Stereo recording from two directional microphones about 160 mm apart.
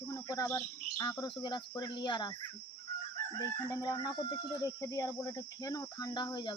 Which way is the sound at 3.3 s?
20° left (ahead or behind).